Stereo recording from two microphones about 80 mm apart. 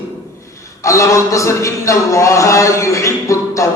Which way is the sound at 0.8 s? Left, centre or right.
Left.